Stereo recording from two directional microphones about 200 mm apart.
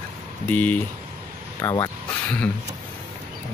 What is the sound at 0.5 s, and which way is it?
Speech, 10° left (ahead or behind).